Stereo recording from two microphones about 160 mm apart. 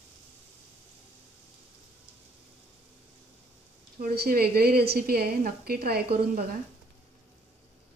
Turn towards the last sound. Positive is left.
turn(degrees=-70)  # may be behind; listen again after turning